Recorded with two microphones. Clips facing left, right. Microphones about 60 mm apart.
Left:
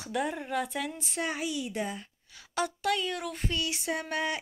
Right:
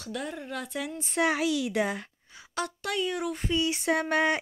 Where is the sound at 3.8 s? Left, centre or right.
Right.